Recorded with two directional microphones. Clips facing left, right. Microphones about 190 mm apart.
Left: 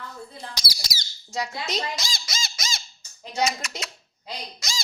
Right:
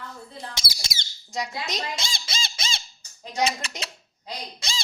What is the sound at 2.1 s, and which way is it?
Squawk, 30° right (ahead or behind).